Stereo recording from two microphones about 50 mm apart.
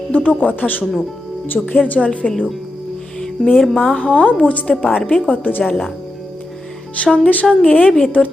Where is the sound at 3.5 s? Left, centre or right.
Centre.